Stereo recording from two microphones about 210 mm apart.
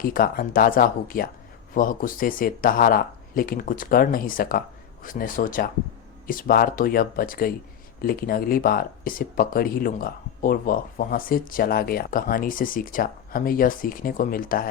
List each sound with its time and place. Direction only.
0.0 s speech: 45° left (ahead or behind)